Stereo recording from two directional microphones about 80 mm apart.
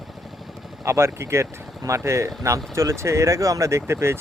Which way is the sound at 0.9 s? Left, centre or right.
Right.